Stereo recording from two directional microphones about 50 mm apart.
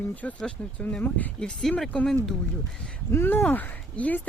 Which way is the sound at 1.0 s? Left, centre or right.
Left.